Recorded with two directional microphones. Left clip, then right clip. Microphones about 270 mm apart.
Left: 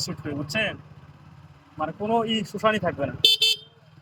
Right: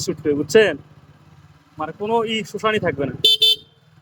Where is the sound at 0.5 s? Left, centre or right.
Centre.